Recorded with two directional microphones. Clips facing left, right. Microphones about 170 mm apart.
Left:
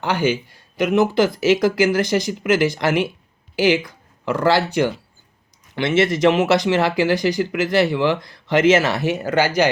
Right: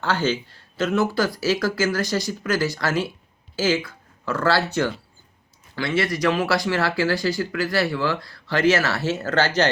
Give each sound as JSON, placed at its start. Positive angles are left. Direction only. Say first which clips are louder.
{"t": 0.0, "sound": "speech", "louder": "left 3 dB", "side_deg": 15}